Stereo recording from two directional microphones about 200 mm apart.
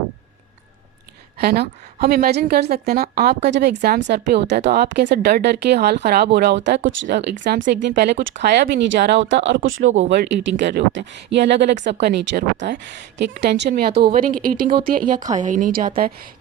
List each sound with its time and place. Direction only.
1.4 s a woman's voice: 50° right (ahead or behind)
7.4 s speech: 40° right (ahead or behind)
7.7 s a woman's voice: 55° right (ahead or behind)
9.6 s speech: 80° right
10.1 s a woman's voice: 60° right (ahead or behind); by 15.9 s 45° right (ahead or behind)